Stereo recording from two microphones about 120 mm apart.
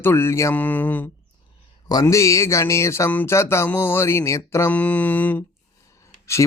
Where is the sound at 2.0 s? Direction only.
25° left (ahead or behind).